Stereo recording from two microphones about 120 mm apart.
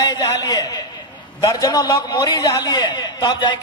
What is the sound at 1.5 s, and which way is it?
A man's voice, 30° left (ahead or behind).